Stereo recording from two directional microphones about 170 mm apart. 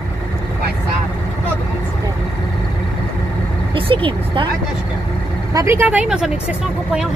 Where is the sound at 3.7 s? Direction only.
30° right (ahead or behind).